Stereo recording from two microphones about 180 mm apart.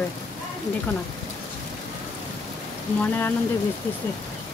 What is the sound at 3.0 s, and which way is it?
Speech, 10° left (ahead or behind).